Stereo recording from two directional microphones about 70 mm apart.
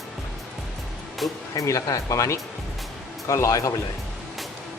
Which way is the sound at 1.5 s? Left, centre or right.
Left.